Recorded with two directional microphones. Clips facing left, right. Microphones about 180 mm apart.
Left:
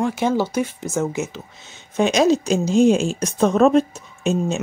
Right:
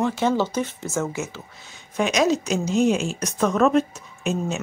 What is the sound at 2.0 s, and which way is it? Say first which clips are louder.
Speech: left 4 dB; 30° left (ahead or behind).